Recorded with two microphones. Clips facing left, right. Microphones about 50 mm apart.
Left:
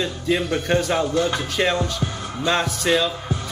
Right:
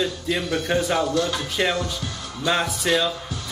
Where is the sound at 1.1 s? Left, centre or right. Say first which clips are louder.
Left 2 dB; left.